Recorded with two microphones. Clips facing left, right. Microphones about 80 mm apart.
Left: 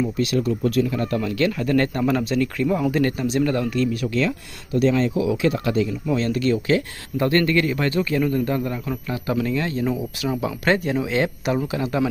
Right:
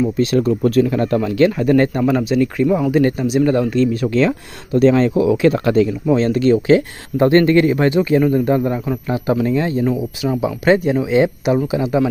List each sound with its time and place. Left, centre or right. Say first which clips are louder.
0.2 s speech: right 6 dB; right; by 2.0 s centre
2.0 s speech: right 5 dB; centre
3.5 s speech: right 6 dB; right
6.0 s speech: right 6 dB; right
9.8 s speech: right 5 dB; centre